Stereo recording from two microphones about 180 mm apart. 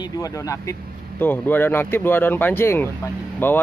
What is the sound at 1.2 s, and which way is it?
Speech, 10° left (ahead or behind).